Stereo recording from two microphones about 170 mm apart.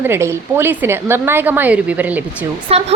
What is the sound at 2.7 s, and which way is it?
Speech, 35° right (ahead or behind).